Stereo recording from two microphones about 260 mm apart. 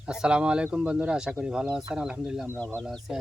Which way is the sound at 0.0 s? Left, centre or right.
Centre.